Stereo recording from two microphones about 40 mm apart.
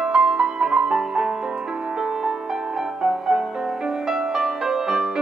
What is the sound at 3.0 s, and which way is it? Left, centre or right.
Music, centre.